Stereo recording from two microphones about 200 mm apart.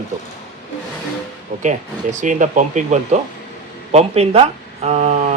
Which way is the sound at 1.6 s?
40° right (ahead or behind).